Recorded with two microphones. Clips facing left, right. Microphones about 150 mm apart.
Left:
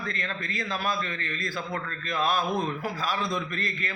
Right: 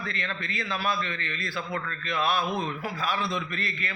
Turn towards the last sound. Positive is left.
turn(degrees=40)  # may be behind; listen again after turning